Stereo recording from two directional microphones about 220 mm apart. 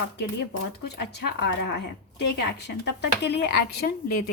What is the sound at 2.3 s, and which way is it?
A woman's voice, 50° left (ahead or behind).